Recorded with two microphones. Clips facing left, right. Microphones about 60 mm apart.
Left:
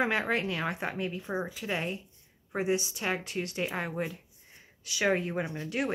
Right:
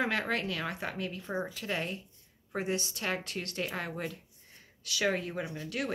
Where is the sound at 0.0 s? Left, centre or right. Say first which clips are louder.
Left 3 dB; centre.